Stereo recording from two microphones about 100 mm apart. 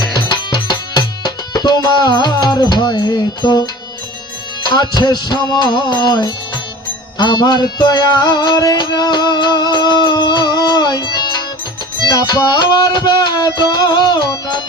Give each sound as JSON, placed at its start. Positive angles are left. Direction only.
{"t": 0.0, "sound": "music", "side_deg": 45}